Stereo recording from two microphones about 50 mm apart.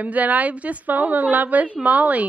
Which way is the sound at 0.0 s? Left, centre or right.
Right.